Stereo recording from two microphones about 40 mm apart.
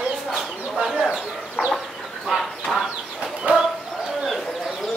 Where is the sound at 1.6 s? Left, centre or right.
Right.